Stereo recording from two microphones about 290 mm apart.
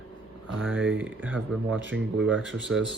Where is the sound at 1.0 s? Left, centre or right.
Centre.